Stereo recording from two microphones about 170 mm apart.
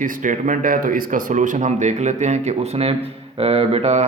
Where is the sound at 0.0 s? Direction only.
50° right (ahead or behind).